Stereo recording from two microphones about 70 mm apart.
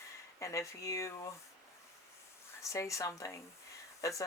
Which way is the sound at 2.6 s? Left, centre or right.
Left.